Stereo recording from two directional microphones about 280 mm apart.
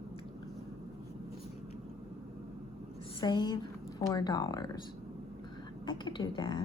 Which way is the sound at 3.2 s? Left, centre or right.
Centre.